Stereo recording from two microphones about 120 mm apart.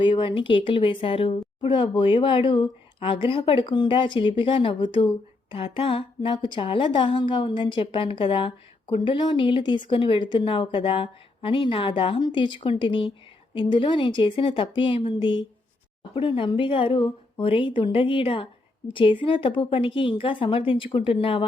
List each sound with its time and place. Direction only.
0.0 s a woman's voice: 45° left (ahead or behind)